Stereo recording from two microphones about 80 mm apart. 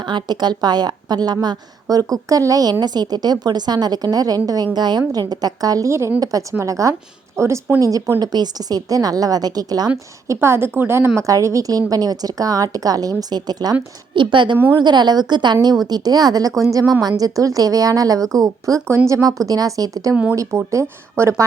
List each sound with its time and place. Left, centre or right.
0.0 s a woman's voice: right
2.8 s a woman's voice: right
8.2 s a woman's voice: right
10.2 s a woman's voice: right
14.2 s a woman's voice: right
14.8 s a woman's voice: right